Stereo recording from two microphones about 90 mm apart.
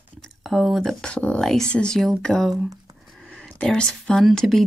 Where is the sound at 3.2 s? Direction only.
5° left (ahead or behind).